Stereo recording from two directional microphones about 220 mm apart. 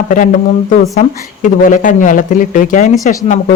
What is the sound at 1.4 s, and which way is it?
A woman's voice, 35° left (ahead or behind).